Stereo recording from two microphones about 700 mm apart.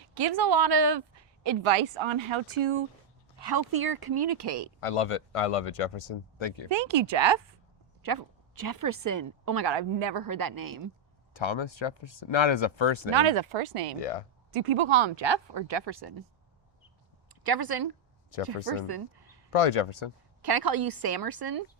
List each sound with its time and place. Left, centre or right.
0.1 s a woman's voice: right
3.4 s a woman's voice: right
4.8 s speech: left
6.7 s a woman's voice: right
11.3 s speech: left
13.1 s a woman's voice: right
14.0 s speech: left
14.5 s a woman's voice: right
17.4 s a woman's voice: right
19.5 s speech: left
20.4 s speech: right